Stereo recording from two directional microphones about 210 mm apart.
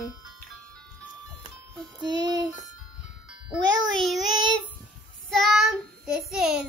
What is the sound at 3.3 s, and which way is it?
Music, centre (ahead or behind).